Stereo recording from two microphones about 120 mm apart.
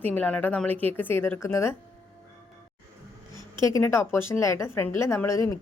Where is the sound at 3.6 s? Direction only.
25° left (ahead or behind).